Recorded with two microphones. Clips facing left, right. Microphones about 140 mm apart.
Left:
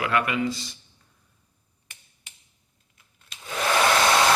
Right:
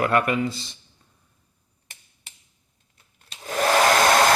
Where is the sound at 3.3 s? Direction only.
40° right (ahead or behind).